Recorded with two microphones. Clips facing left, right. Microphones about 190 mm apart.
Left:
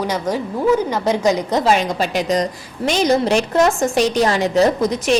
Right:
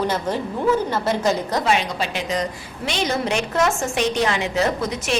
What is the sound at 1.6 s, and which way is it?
A woman's voice, 40° left (ahead or behind).